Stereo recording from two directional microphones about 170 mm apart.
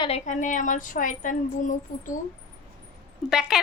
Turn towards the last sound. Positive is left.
turn(degrees=0)  # may be behind; listen again after turning